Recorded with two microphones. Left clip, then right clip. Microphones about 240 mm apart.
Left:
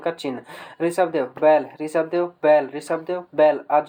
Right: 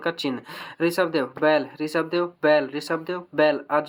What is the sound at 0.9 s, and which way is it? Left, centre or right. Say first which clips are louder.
Speech: left 2 dB; right.